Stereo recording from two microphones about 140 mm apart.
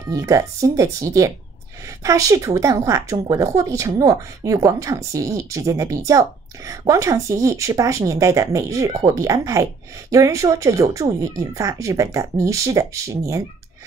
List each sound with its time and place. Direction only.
0.1 s speech: 20° right (ahead or behind)